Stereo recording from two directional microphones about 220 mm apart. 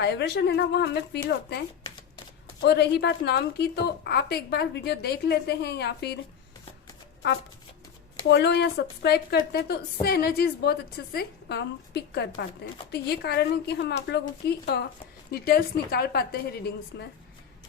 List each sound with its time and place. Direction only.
0.0 s a woman's voice: 50° left (ahead or behind)
2.6 s a woman's voice: 50° left (ahead or behind)
8.3 s a woman's voice: 50° left (ahead or behind)